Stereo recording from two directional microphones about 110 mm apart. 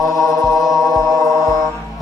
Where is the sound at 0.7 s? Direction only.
30° left (ahead or behind).